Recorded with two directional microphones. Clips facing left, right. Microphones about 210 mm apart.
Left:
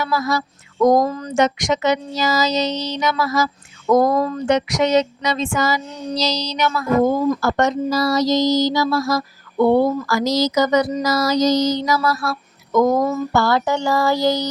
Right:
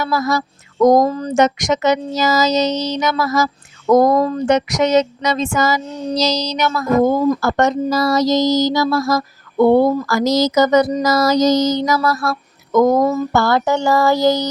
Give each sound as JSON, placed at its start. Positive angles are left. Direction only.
{"t": 0.0, "sound": "speech", "side_deg": -45}